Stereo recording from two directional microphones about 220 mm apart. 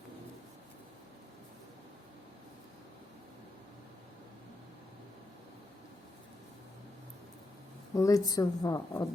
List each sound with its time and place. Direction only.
7.9 s a woman's voice: 15° left (ahead or behind)